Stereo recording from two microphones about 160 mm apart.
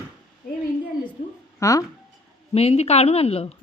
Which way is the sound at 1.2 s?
60° left (ahead or behind).